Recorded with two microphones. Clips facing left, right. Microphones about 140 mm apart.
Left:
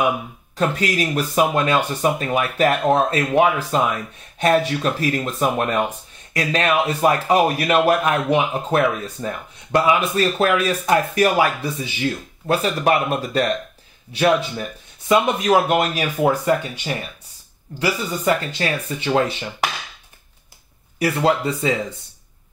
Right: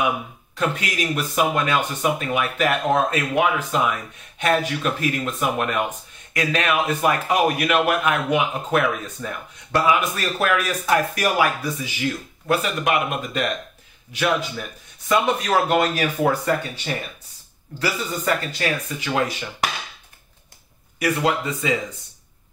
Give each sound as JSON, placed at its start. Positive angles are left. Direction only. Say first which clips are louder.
{"t": 0.6, "sound": "speech", "louder": "left 4 dB", "side_deg": 40}
{"t": 15.0, "sound": "speech", "louder": "left 3 dB", "side_deg": 10}
{"t": 18.6, "sound": "speech", "louder": "left 2 dB", "side_deg": 30}
{"t": 21.0, "sound": "speech", "louder": "left 3 dB", "side_deg": 30}